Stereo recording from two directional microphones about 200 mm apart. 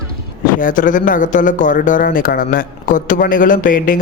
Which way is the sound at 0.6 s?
40° left (ahead or behind).